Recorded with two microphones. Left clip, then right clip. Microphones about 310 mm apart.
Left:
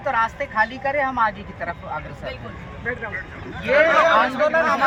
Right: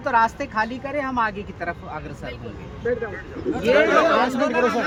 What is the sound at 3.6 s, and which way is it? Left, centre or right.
Speech, centre.